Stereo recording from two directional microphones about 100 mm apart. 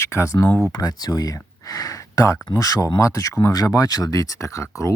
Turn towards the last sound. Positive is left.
turn(degrees=30)  # may be behind; listen again after turning